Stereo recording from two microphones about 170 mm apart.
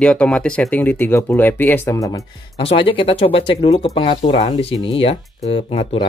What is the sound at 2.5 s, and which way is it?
Speech, 35° left (ahead or behind).